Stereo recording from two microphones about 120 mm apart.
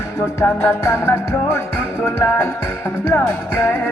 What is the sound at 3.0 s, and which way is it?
Music, 20° left (ahead or behind).